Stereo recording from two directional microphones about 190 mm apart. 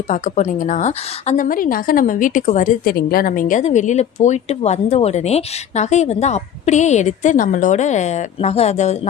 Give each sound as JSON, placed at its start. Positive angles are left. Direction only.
{"t": 0.1, "sound": "a woman's voice", "side_deg": 40}